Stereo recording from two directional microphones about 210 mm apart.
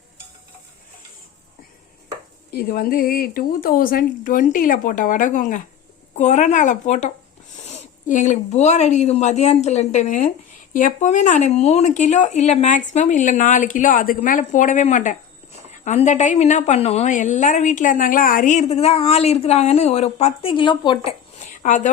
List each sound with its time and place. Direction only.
2.5 s a woman's voice: 45° left (ahead or behind)